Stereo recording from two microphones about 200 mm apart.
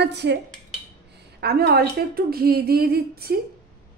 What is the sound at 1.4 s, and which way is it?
Speech, 55° right (ahead or behind).